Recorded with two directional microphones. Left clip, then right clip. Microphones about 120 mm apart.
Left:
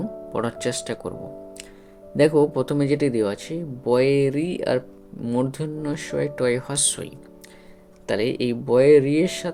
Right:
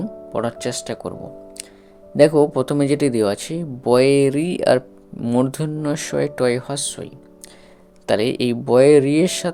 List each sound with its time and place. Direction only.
0.0 s speech: 15° right (ahead or behind)
2.1 s speech: 35° right (ahead or behind); by 6.6 s 50° right (ahead or behind)
6.6 s speech: 25° right (ahead or behind)
8.0 s speech: 50° right (ahead or behind)